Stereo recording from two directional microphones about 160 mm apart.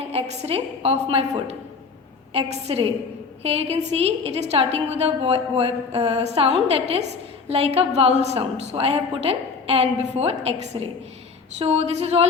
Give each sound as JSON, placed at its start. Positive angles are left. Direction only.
{"t": 0.1, "sound": "a woman's voice", "side_deg": -40}